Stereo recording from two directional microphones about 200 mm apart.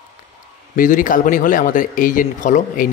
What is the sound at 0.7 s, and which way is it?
A man's voice, 40° left (ahead or behind).